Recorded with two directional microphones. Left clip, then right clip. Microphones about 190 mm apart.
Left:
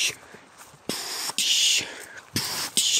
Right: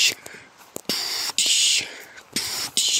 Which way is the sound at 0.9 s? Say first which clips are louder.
Right 5 dB; 10° left (ahead or behind).